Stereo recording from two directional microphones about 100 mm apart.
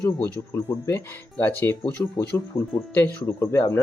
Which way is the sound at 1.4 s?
20° left (ahead or behind).